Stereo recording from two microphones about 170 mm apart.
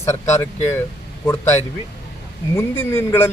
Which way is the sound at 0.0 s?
15° left (ahead or behind).